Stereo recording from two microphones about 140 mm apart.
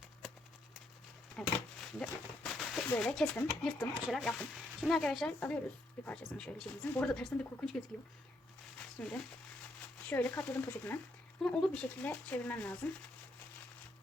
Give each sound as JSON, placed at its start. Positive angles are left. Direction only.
{"t": 1.4, "sound": "a sound", "side_deg": 5}
{"t": 3.0, "sound": "speech", "side_deg": 5}
{"t": 9.0, "sound": "speech", "side_deg": 10}